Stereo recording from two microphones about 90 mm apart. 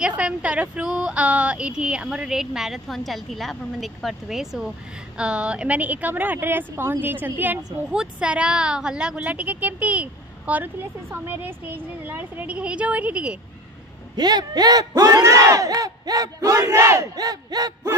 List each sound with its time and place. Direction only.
0.2 s a woman's voice: 15° right (ahead or behind)
7.9 s a woman's voice: 10° right (ahead or behind)
14.1 s speech: 50° right (ahead or behind)